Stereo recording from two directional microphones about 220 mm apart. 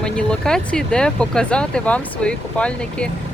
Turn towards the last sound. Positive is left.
turn(degrees=5)  # may be behind; listen again after turning